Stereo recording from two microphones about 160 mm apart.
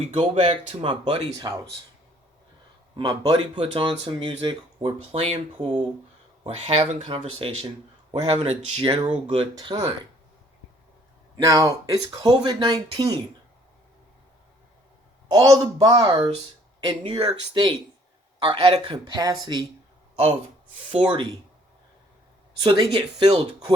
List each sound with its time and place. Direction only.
0.0 s speech: 40° right (ahead or behind)
2.9 s speech: 30° right (ahead or behind)
8.4 s speech: 45° right (ahead or behind)
8.8 s speech: 30° right (ahead or behind)
11.4 s speech: 20° right (ahead or behind)
15.3 s speech: 25° right (ahead or behind)
20.7 s speech: 30° right (ahead or behind)
22.6 s speech: 25° right (ahead or behind)